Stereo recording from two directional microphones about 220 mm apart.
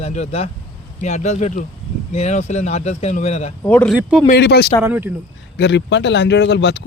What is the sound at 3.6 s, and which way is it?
Speech, 5° left (ahead or behind).